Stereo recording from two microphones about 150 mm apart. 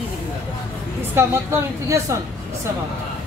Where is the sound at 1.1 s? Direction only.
15° right (ahead or behind).